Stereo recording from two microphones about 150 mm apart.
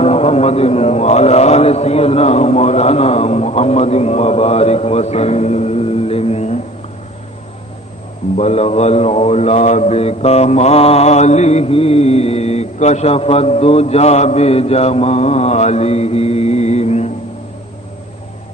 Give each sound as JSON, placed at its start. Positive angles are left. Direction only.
{"t": 0.0, "sound": "a man's voice", "side_deg": 45}
{"t": 8.4, "sound": "a man's voice", "side_deg": 45}